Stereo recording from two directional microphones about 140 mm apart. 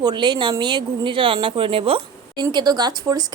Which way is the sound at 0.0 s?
30° right (ahead or behind).